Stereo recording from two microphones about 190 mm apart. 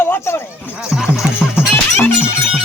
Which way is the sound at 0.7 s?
5° right (ahead or behind).